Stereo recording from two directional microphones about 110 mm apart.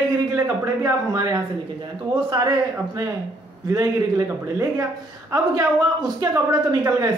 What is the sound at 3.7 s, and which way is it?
A woman's voice, 30° right (ahead or behind).